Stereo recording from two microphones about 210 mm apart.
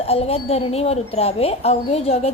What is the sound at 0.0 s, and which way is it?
Speech, 30° left (ahead or behind).